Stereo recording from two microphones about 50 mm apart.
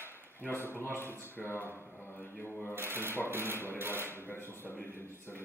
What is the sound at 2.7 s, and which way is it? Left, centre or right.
Speech, right.